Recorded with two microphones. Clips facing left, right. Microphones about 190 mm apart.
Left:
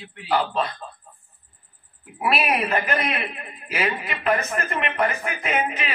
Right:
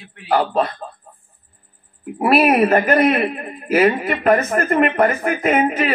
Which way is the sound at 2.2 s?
50° right (ahead or behind).